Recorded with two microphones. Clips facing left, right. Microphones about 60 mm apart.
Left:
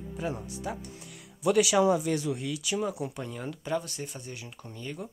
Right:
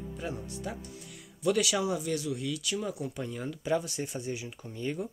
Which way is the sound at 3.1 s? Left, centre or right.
Centre.